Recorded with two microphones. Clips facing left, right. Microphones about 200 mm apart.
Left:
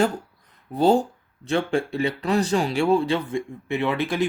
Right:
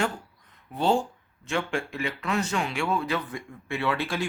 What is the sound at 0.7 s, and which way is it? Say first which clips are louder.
Speech: left 6 dB; 40° left (ahead or behind).